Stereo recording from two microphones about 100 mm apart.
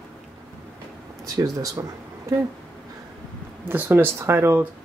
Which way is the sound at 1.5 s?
35° right (ahead or behind).